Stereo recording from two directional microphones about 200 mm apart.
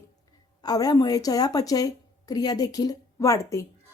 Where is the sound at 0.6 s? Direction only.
20° left (ahead or behind).